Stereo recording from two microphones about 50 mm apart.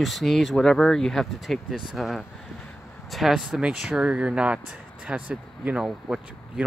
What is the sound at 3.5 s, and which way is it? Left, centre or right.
Speech, centre.